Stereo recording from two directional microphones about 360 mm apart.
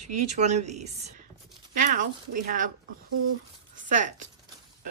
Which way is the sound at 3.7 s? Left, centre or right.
Right.